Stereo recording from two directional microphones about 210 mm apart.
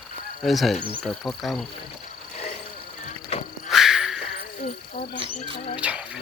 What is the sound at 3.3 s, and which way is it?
Frog, 30° left (ahead or behind).